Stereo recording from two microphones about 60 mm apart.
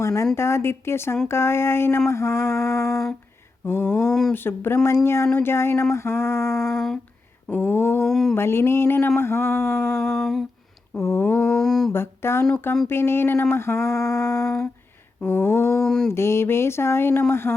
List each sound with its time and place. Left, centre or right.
0.0 s a woman's voice: left
3.8 s mantra: centre
4.3 s speech: left
6.6 s a sound: centre
7.6 s speech: left
8.0 s mantra: centre
8.4 s speech: left
9.8 s a sound: centre
11.0 s speech: left
11.3 s mantra: centre
11.9 s speech: left
15.3 s speech: left
15.8 s mantra: centre
16.0 s speech: left